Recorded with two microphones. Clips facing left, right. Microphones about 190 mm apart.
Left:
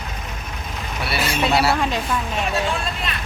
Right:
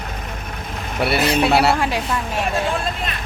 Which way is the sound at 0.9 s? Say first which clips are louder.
Right 7 dB; 60° right (ahead or behind).